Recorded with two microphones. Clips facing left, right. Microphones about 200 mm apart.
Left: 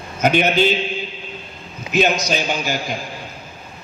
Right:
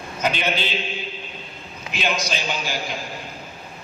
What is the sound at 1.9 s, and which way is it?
Speech, 45° left (ahead or behind).